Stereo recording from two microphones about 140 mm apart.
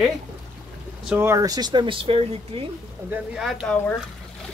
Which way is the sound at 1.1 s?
20° right (ahead or behind).